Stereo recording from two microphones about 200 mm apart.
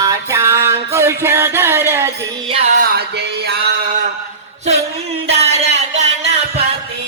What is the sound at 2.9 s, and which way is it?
Music, 55° right (ahead or behind).